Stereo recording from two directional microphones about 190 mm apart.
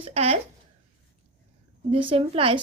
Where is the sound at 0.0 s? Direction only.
30° right (ahead or behind).